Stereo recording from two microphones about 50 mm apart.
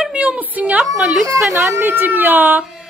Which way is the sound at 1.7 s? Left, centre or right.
Right.